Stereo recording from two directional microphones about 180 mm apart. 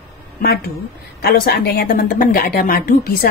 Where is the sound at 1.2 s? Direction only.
60° left (ahead or behind).